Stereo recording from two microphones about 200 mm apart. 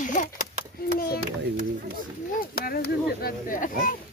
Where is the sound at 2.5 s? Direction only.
50° left (ahead or behind).